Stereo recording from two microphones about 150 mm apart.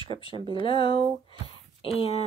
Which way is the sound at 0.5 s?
35° left (ahead or behind).